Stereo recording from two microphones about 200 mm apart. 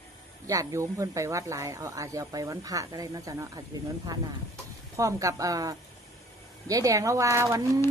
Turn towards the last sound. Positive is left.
turn(degrees=-15)  # may be behind; listen again after turning